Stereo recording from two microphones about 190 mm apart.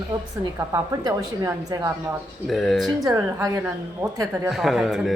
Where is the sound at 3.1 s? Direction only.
15° right (ahead or behind).